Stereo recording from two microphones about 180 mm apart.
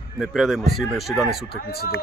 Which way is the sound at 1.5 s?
60° left (ahead or behind).